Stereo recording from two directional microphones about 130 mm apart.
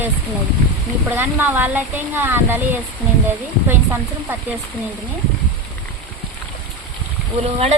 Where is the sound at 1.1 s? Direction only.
15° right (ahead or behind).